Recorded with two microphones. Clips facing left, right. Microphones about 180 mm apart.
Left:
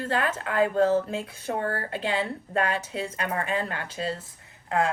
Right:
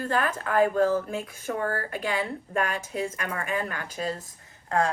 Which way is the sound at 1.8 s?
25° left (ahead or behind).